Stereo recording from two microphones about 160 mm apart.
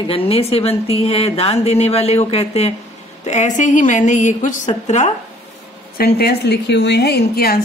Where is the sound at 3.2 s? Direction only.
45° left (ahead or behind).